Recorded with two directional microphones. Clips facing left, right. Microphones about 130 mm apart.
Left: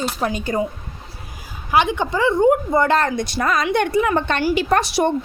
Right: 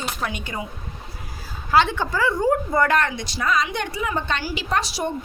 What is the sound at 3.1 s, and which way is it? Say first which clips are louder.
A woman's voice: left 4 dB; 50° left (ahead or behind).